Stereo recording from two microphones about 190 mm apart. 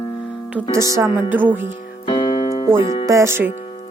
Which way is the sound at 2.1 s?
25° left (ahead or behind).